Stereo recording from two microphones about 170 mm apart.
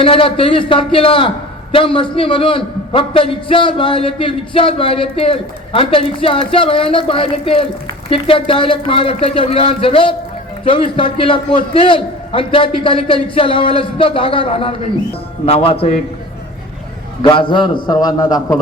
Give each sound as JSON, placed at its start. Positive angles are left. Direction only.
{"t": 0.0, "sound": "a man's voice", "side_deg": 30}
{"t": 17.2, "sound": "a man's voice", "side_deg": 30}